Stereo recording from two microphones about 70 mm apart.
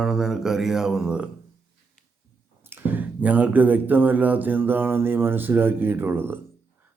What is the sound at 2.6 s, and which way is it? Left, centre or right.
Speech, right.